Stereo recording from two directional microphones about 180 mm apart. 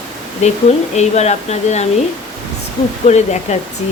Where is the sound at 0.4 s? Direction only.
40° left (ahead or behind).